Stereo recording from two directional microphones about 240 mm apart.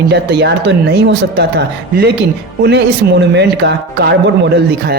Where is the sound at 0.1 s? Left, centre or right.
Right.